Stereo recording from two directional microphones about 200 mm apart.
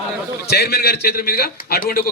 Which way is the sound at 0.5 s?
50° left (ahead or behind).